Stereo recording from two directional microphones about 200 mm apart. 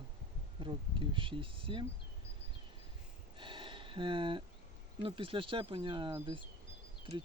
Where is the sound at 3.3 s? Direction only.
25° right (ahead or behind).